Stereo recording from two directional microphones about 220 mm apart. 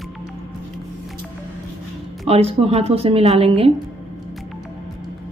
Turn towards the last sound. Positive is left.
turn(degrees=-25)  # may be behind; listen again after turning